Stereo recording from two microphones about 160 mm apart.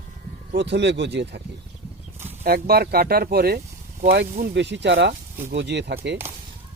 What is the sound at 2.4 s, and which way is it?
Speech, 75° right (ahead or behind).